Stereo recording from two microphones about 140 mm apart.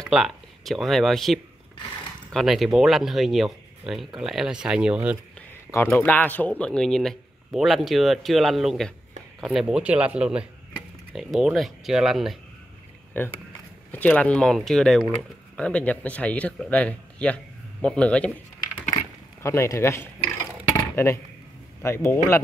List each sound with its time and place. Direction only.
0.0 s speech: centre (ahead or behind)
5.5 s a man's voice: 15° left (ahead or behind); by 12.4 s centre (ahead or behind)
13.2 s speech: 15° left (ahead or behind)
19.4 s speech: 20° left (ahead or behind)